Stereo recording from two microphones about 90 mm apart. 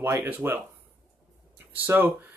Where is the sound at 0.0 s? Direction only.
25° right (ahead or behind).